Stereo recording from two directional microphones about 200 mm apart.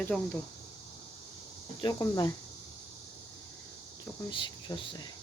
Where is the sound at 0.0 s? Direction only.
10° left (ahead or behind).